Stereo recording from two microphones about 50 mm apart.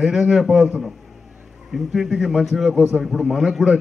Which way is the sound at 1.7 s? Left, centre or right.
Centre.